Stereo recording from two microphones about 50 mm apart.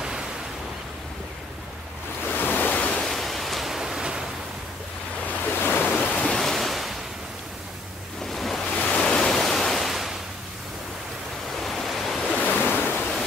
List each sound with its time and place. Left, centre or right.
2.3 s waves: left
3.0 s pink noise: centre
5.4 s waves: left
6.3 s waves: centre
8.3 s waves: centre
8.7 s waves: centre
9.2 s pink noise: centre
11.6 s waves: centre
12.4 s waves: left